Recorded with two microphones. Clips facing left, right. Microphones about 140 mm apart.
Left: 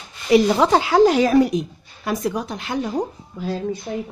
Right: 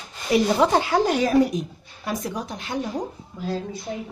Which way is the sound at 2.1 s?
70° left (ahead or behind).